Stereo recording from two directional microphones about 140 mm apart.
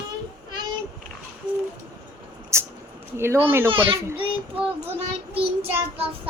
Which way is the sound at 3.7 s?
40° right (ahead or behind).